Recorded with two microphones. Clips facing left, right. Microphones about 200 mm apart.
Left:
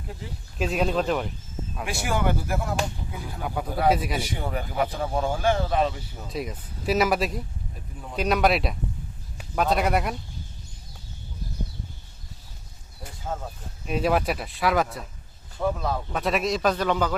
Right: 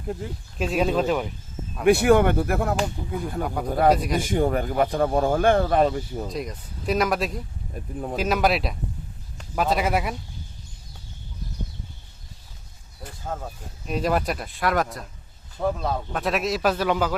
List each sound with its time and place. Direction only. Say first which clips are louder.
0.6 s speech: right 2 dB; centre (ahead or behind)
1.8 s speech: right 11 dB; 60° right (ahead or behind)
3.4 s speech: right 3 dB; centre (ahead or behind)
4.2 s speech: right 8 dB; 50° right (ahead or behind)
6.3 s speech: right 1 dB; 5° left (ahead or behind)
13.8 s speech: even; 5° left (ahead or behind)
15.6 s speech: right 1 dB; 10° right (ahead or behind)
16.1 s speech: left 1 dB; centre (ahead or behind)